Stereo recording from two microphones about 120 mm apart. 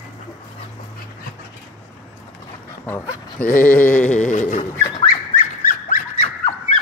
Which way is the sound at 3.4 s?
15° left (ahead or behind).